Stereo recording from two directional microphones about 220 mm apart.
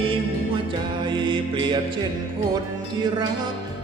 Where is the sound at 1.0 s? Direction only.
20° right (ahead or behind).